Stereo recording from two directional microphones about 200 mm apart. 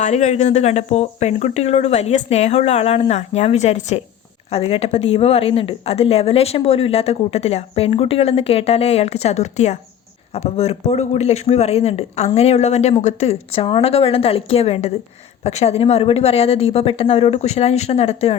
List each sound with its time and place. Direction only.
0.0 s a woman's voice: 35° left (ahead or behind)